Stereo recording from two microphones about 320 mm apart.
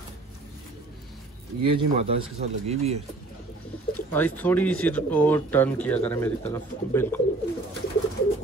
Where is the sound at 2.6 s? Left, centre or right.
Centre.